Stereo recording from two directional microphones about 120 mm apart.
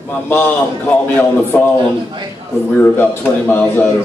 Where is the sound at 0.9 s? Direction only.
15° left (ahead or behind).